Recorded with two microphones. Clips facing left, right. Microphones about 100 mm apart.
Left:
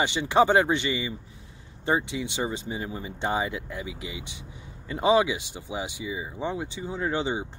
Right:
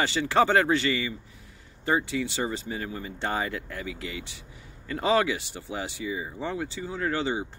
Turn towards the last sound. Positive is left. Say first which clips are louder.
# even
turn(degrees=20)  # may be behind; listen again after turning